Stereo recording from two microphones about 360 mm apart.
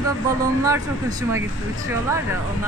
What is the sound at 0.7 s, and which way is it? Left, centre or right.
Speech, centre.